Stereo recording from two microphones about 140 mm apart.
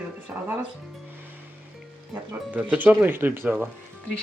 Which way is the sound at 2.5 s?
10° right (ahead or behind).